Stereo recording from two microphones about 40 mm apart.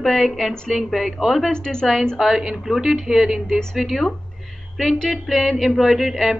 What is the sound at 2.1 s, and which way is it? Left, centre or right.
Speech, centre.